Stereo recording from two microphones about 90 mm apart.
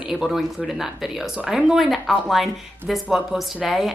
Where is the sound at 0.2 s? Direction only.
Centre (ahead or behind).